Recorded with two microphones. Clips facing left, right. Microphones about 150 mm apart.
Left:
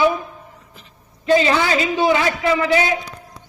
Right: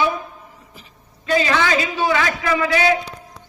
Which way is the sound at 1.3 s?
25° left (ahead or behind).